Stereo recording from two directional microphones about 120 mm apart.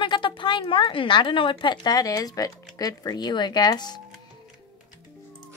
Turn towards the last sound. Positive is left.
turn(degrees=35)  # may be behind; listen again after turning